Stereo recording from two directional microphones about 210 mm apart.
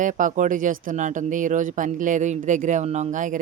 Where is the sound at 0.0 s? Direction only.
40° right (ahead or behind).